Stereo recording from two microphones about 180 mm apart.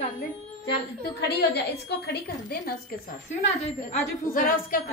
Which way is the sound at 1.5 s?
65° left (ahead or behind).